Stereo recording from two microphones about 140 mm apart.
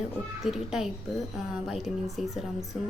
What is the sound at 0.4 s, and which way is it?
A woman's voice, 5° right (ahead or behind).